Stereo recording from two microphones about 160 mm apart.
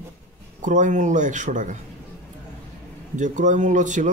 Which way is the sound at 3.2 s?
50° right (ahead or behind).